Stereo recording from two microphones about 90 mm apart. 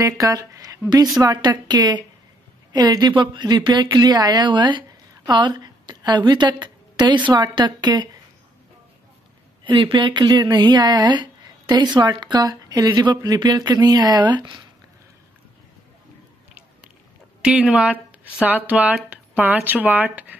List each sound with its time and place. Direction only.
0.0 s a woman's voice: 40° right (ahead or behind)
9.7 s speech: 75° right (ahead or behind); by 14.6 s 55° right (ahead or behind)
17.4 s speech: 15° right (ahead or behind)